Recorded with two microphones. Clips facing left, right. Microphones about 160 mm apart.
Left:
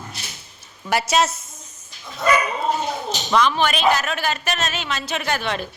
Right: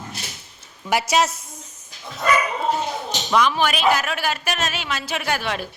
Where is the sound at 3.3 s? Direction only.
10° right (ahead or behind).